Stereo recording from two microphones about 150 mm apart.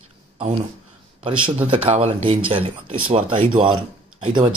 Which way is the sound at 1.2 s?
35° right (ahead or behind).